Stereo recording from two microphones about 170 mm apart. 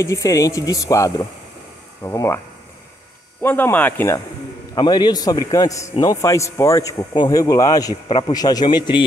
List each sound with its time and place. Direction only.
0.0 s a man's voice: 20° left (ahead or behind)
3.4 s speech: 10° left (ahead or behind)
4.7 s a man's voice: 25° left (ahead or behind)